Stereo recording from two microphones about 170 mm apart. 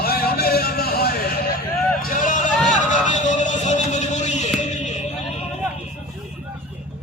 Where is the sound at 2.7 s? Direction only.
45° left (ahead or behind).